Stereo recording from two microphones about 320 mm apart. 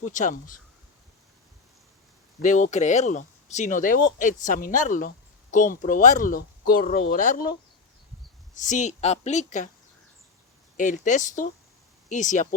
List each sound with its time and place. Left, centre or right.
0.0 s speech: left
2.4 s speech: left
8.5 s speech: left
10.8 s speech: left